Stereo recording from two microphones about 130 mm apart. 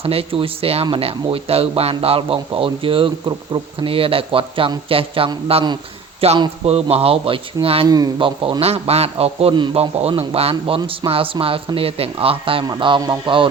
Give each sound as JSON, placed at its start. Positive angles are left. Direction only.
{"t": 0.0, "sound": "speech", "side_deg": -45}
{"t": 5.6, "sound": "a sound", "side_deg": -35}
{"t": 6.7, "sound": "speech", "side_deg": -50}
{"t": 7.9, "sound": "speech", "side_deg": -30}
{"t": 12.6, "sound": "speech", "side_deg": -35}